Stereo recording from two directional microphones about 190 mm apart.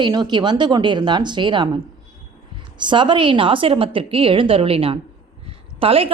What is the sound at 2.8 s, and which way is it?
A woman's voice, 25° right (ahead or behind).